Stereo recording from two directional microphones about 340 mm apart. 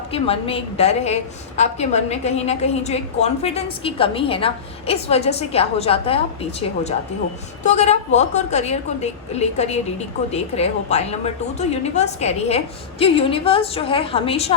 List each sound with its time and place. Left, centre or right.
0.1 s a woman's voice: centre